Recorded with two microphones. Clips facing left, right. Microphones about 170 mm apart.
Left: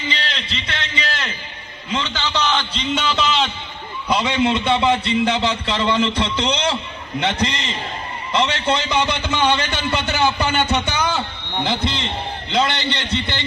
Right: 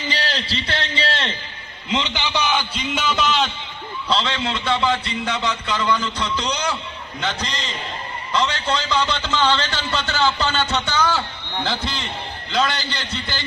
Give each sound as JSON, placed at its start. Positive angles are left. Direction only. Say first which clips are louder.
{"t": 0.1, "sound": "a sound", "louder": "right 5 dB", "side_deg": -35}
{"t": 1.9, "sound": "a man's voice", "louder": "even", "side_deg": -15}
{"t": 4.1, "sound": "a man's voice", "louder": "left 5 dB", "side_deg": 15}